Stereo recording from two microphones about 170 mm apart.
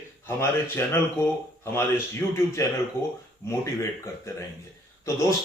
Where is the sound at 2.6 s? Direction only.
15° left (ahead or behind).